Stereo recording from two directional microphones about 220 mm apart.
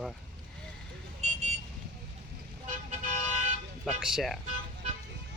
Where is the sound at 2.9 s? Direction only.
35° right (ahead or behind).